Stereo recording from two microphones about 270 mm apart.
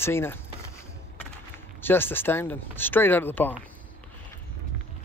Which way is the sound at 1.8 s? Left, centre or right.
Centre.